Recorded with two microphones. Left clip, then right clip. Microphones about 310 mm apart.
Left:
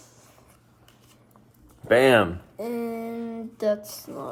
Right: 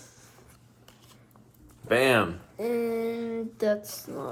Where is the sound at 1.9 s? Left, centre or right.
Left.